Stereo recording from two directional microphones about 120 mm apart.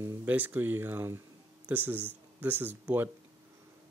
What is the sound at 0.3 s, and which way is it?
Speech, 15° right (ahead or behind).